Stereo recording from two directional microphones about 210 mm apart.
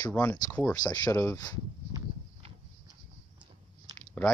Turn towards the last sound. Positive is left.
turn(degrees=10)  # may be behind; listen again after turning